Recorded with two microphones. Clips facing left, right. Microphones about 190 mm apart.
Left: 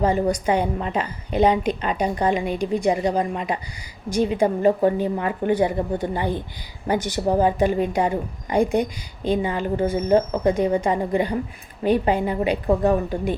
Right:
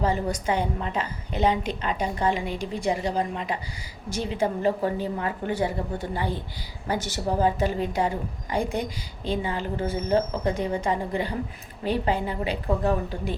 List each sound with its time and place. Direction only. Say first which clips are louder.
0.0 s a woman's voice: left 5 dB; 15° left (ahead or behind)
12.6 s speech: left 4 dB; 40° left (ahead or behind)